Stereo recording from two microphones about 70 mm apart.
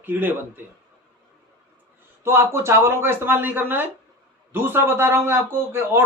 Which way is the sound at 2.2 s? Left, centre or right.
Right.